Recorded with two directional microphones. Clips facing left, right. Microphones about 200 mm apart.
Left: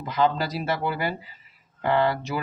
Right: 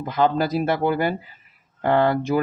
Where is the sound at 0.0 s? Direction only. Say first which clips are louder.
Right 3 dB; 50° right (ahead or behind).